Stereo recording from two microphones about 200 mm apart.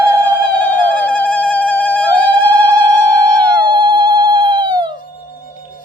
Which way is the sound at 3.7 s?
25° right (ahead or behind).